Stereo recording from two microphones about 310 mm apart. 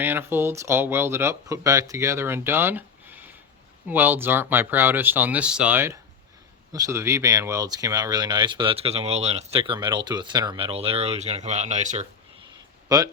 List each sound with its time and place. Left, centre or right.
0.0 s speech: centre; by 12.0 s right
12.9 s speech: centre